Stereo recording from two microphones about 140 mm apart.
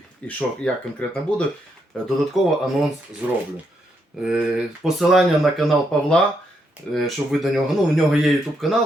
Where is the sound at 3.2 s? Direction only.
10° right (ahead or behind).